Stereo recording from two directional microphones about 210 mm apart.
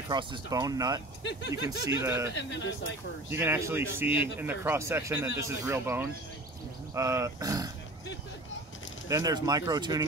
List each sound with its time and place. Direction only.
0.1 s speech: 20° right (ahead or behind)
2.3 s speech: 60° left (ahead or behind)
3.3 s speech: 10° right (ahead or behind)
9.1 s speech: 20° right (ahead or behind)